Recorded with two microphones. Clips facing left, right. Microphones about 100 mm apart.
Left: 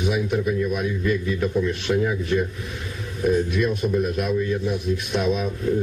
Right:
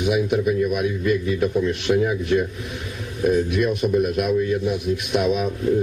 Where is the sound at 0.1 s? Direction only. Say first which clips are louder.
Right 5 dB; 15° right (ahead or behind).